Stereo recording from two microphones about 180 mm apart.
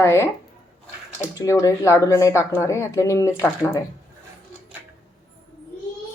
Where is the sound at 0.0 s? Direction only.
15° left (ahead or behind).